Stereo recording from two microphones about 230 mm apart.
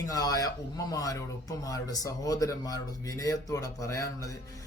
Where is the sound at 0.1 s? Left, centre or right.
Centre.